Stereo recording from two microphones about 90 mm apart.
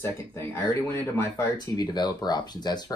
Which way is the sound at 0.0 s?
30° left (ahead or behind).